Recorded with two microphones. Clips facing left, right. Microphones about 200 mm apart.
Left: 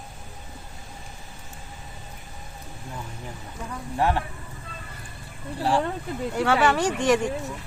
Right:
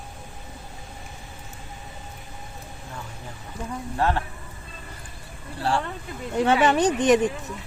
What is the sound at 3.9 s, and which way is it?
Speech, 15° left (ahead or behind).